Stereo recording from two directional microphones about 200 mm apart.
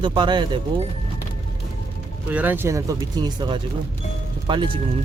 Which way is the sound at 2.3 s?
10° right (ahead or behind).